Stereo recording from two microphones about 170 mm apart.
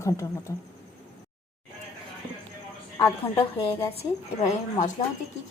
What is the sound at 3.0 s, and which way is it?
Speech, 15° left (ahead or behind).